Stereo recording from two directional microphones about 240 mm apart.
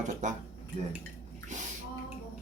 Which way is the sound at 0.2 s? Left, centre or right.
Right.